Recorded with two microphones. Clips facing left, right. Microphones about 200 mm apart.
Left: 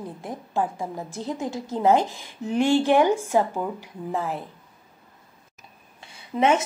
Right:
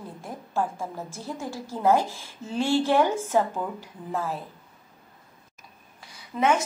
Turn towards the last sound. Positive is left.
turn(degrees=20)  # may be behind; listen again after turning